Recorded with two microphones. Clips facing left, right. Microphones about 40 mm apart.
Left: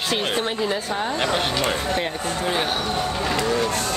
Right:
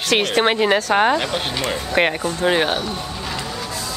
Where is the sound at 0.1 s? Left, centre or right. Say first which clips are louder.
Right 8 dB; right.